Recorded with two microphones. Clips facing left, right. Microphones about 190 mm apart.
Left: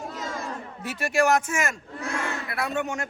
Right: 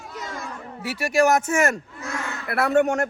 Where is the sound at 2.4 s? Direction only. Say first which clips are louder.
Right 9 dB; 60° right (ahead or behind).